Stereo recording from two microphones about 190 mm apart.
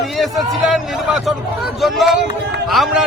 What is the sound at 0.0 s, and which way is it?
A man's voice, centre (ahead or behind).